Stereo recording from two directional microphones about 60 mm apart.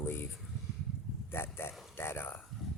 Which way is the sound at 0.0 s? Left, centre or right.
Left.